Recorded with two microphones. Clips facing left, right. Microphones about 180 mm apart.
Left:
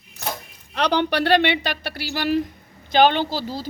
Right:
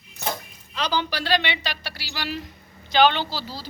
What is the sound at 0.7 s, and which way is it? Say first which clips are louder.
Speech: left 6 dB; 65° left (ahead or behind).